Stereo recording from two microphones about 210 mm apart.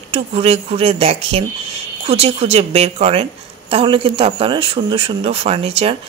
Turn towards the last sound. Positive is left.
turn(degrees=-30)  # may be behind; listen again after turning